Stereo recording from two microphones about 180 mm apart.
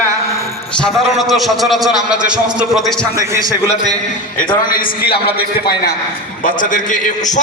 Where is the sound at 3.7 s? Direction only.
40° left (ahead or behind).